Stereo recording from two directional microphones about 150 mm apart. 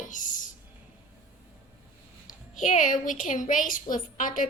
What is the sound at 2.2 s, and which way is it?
A woman's voice, 55° left (ahead or behind).